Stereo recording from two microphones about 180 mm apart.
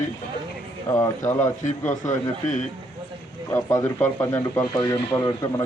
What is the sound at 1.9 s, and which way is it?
Speech, 45° left (ahead or behind).